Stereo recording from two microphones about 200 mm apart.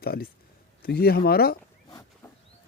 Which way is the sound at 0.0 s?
50° left (ahead or behind).